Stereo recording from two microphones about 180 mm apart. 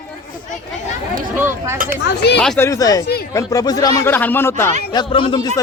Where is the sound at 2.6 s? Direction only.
20° left (ahead or behind).